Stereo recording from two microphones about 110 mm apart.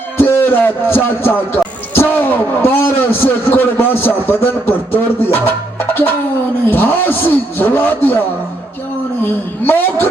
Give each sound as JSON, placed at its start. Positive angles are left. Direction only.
{"t": 0.2, "sound": "music", "side_deg": 20}
{"t": 6.7, "sound": "a man's voice", "side_deg": 20}
{"t": 9.2, "sound": "a man's voice", "side_deg": 20}